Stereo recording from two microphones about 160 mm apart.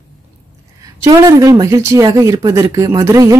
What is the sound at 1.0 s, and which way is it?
A woman's voice, 20° right (ahead or behind).